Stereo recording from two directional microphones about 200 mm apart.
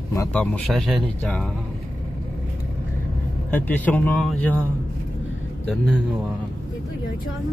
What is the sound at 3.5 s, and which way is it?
Speech, 10° left (ahead or behind).